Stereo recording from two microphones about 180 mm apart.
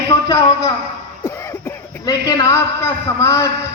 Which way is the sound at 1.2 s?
15° left (ahead or behind).